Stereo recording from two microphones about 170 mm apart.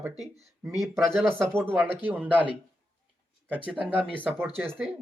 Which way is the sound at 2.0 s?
10° right (ahead or behind).